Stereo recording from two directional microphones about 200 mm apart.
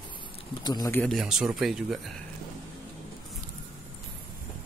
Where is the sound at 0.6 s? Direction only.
20° left (ahead or behind).